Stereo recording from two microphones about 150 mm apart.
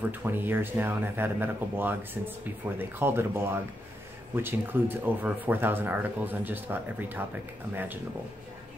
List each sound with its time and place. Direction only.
0.1 s speech: 15° right (ahead or behind)